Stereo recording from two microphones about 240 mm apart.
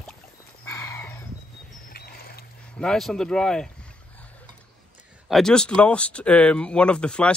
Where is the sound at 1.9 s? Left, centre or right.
Left.